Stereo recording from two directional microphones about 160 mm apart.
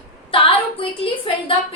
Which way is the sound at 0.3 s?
35° left (ahead or behind).